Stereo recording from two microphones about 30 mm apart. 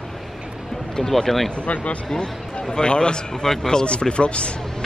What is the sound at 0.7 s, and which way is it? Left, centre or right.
Speech, centre.